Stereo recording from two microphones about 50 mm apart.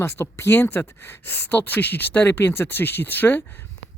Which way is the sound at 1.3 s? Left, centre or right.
Left.